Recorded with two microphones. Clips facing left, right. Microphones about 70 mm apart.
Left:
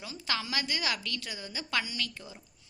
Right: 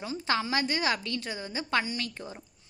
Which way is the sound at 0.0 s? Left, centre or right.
Right.